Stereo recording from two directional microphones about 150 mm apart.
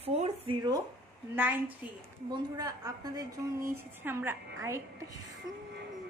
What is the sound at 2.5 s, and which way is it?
A woman's voice, 25° right (ahead or behind).